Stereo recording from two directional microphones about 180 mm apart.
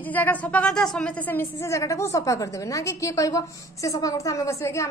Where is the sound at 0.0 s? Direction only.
10° left (ahead or behind).